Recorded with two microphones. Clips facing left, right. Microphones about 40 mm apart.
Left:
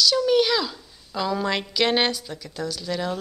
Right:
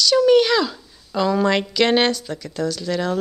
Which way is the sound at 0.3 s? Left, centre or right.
Centre.